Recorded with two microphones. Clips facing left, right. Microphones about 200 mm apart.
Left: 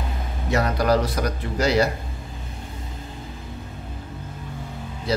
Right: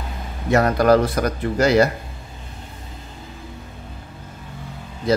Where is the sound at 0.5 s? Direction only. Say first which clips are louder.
Right 5 dB; 55° right (ahead or behind).